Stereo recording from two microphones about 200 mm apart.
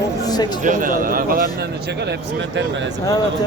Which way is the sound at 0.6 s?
40° right (ahead or behind).